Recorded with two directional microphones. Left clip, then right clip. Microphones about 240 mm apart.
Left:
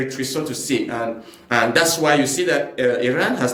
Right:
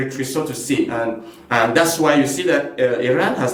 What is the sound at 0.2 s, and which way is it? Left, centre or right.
Speech, left.